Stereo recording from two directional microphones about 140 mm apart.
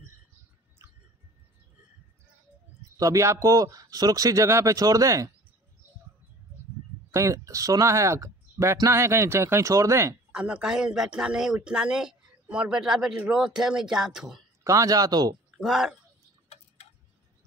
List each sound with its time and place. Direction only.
3.0 s speech: 20° right (ahead or behind)
7.1 s speech: 20° right (ahead or behind)
10.3 s a man's voice: 10° right (ahead or behind)
14.6 s speech: 20° right (ahead or behind)
15.5 s speech: centre (ahead or behind)